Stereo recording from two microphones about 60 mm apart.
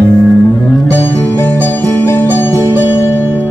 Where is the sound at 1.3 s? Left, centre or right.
Left.